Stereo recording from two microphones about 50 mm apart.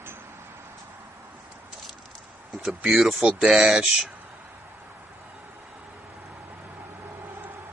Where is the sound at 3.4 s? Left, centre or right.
Centre.